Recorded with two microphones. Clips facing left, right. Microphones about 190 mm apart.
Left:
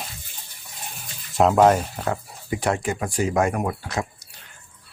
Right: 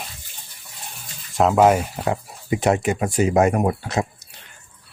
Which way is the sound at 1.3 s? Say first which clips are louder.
Right 1 dB; centre (ahead or behind).